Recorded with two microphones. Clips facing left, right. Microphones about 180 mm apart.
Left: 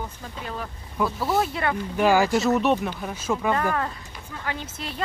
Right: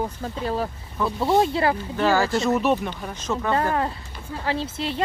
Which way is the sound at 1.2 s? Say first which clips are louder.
Right 7 dB; 25° right (ahead or behind).